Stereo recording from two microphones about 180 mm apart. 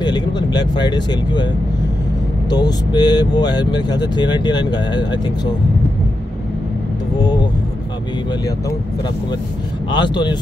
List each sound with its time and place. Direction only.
0.0 s speech: 25° left (ahead or behind)
2.5 s speech: 20° left (ahead or behind)
9.8 s speech: 25° left (ahead or behind)